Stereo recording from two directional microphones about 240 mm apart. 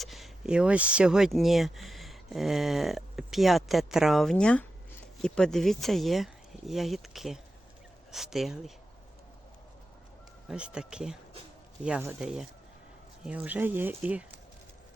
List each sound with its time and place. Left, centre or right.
0.0 s speech: centre
10.5 s speech: centre